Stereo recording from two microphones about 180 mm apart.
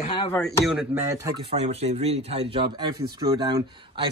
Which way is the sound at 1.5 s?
35° right (ahead or behind).